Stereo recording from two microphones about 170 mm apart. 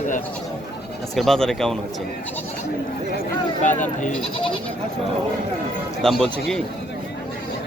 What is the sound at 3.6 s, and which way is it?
Speech, 45° left (ahead or behind).